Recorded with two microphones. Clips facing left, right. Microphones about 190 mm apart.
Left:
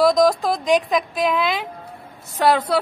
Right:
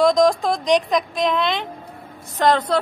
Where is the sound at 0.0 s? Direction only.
5° left (ahead or behind).